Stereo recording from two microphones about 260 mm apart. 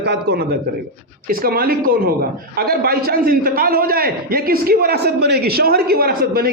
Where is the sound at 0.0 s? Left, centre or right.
Right.